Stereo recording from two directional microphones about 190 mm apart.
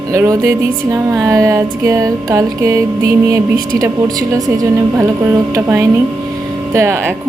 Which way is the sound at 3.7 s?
15° right (ahead or behind).